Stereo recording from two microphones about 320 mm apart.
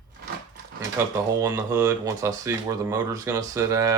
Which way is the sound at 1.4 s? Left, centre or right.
Centre.